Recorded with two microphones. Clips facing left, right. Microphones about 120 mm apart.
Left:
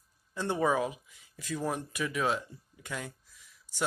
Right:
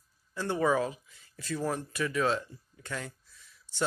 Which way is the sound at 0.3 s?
20° left (ahead or behind).